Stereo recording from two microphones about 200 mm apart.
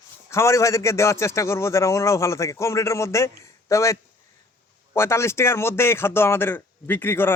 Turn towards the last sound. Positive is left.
turn(degrees=10)  # may be behind; listen again after turning